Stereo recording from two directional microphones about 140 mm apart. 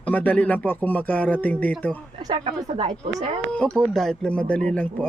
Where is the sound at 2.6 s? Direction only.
50° right (ahead or behind).